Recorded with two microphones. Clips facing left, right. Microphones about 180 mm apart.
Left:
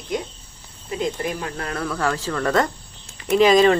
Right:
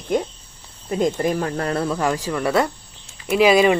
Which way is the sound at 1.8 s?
20° right (ahead or behind).